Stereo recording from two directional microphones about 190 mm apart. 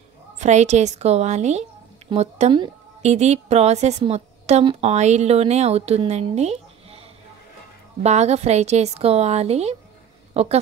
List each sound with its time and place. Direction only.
0.4 s a woman's voice: 40° right (ahead or behind)